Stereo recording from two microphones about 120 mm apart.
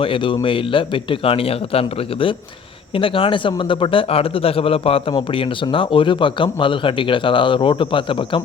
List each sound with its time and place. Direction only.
0.0 s speech: 45° left (ahead or behind)